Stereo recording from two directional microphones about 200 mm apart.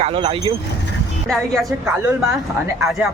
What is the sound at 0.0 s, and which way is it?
Speech, 30° right (ahead or behind).